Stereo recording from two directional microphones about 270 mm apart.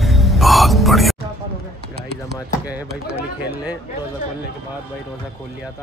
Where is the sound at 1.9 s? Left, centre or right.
Right.